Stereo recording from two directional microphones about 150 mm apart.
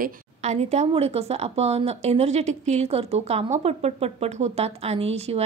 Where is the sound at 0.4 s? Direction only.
50° right (ahead or behind).